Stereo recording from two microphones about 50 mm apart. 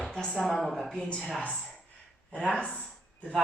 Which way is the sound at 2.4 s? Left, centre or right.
Left.